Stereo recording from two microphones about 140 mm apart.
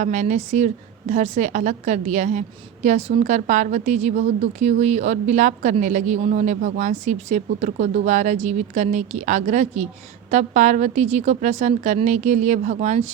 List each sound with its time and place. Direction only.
0.0 s speech: 60° right (ahead or behind)